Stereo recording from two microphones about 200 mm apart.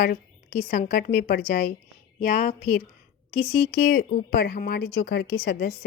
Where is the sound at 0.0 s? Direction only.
50° left (ahead or behind).